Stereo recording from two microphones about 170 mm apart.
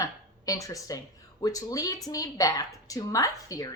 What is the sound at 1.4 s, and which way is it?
A woman's voice, 20° left (ahead or behind).